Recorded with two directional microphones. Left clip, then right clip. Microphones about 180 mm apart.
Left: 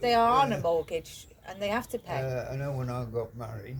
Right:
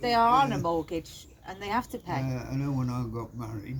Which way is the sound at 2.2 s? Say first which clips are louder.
Left 2 dB; 25° left (ahead or behind).